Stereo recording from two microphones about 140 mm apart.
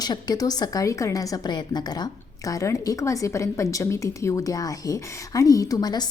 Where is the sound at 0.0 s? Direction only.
30° left (ahead or behind).